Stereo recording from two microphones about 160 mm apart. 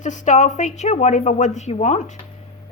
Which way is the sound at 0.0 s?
50° left (ahead or behind).